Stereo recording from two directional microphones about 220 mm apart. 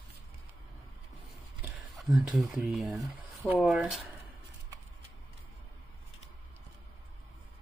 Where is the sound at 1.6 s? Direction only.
Centre (ahead or behind).